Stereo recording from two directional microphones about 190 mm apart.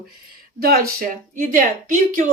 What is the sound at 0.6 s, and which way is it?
Speech, 50° right (ahead or behind).